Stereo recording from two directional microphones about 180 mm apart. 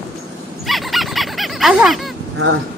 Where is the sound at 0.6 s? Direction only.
Centre (ahead or behind).